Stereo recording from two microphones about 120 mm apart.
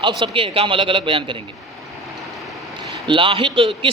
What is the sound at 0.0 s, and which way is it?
A man's voice, 40° right (ahead or behind).